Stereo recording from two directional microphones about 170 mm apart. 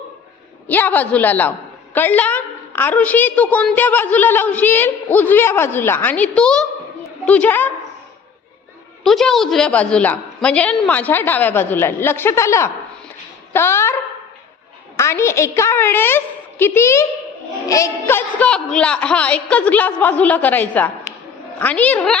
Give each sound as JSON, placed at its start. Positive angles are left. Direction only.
{"t": 0.7, "sound": "a woman's voice", "side_deg": 10}
{"t": 9.0, "sound": "a woman's voice", "side_deg": 0}
{"t": 14.9, "sound": "a woman's voice", "side_deg": 15}